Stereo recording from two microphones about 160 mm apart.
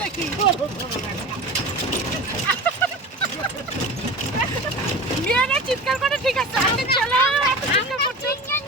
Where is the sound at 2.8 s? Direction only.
10° left (ahead or behind).